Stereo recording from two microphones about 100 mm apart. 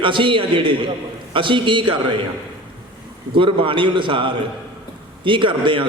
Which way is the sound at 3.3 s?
60° right (ahead or behind).